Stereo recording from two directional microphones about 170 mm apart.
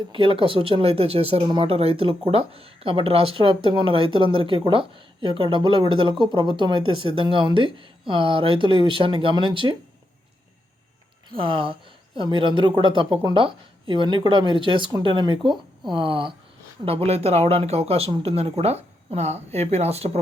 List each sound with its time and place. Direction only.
0.1 s speech: 30° right (ahead or behind)
11.4 s speech: 30° right (ahead or behind)